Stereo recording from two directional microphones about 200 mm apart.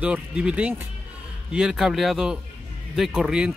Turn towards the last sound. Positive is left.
turn(degrees=-5)  # may be behind; listen again after turning